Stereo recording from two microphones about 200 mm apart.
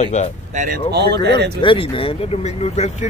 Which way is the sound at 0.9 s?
55° right (ahead or behind).